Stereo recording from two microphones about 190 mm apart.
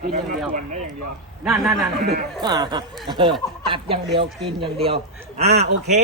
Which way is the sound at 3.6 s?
25° right (ahead or behind).